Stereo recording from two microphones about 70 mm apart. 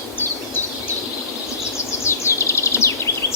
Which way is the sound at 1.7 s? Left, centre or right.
Left.